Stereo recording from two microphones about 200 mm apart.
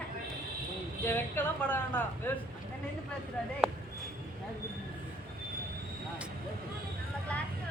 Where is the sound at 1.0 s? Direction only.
10° left (ahead or behind).